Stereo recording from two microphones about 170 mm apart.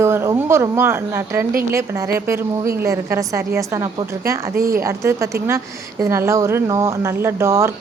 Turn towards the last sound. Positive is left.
turn(degrees=-15)  # may be behind; listen again after turning